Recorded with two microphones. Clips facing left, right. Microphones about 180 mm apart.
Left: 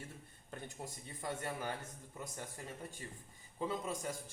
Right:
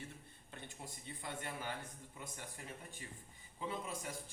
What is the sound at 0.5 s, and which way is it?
A man's voice, 45° left (ahead or behind).